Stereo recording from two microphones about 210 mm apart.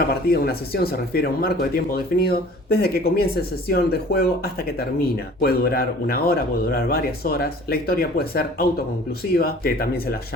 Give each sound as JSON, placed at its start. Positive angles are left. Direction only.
{"t": 0.1, "sound": "speech", "side_deg": 50}